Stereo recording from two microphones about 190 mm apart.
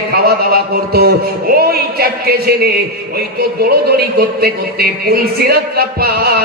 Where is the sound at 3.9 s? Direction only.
55° right (ahead or behind).